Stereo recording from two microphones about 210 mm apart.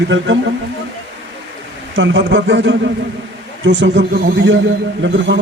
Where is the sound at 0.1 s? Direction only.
65° right (ahead or behind).